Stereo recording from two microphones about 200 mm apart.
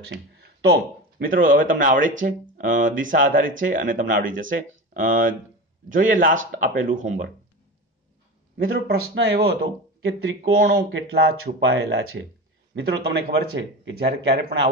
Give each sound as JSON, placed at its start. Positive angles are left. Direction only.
{"t": 1.2, "sound": "speech", "side_deg": -45}
{"t": 8.5, "sound": "speech", "side_deg": -45}